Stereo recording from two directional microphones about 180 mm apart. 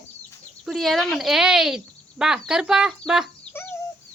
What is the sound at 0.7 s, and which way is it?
Speech, centre (ahead or behind).